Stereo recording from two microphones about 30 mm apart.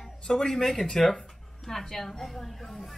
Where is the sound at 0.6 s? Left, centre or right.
Centre.